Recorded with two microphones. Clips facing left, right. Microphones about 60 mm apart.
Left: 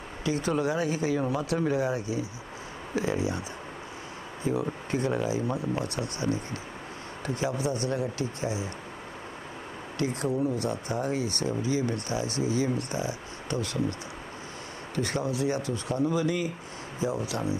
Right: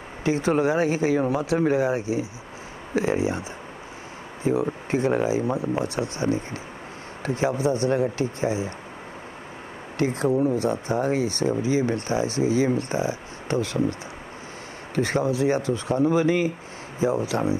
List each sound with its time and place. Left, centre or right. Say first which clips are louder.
0.2 s speech: right 6 dB; right
9.9 s speech: right 6 dB; right
15.0 s speech: right 6 dB; right